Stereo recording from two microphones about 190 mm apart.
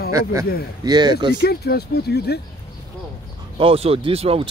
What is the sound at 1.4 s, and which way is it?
Speech, 55° left (ahead or behind).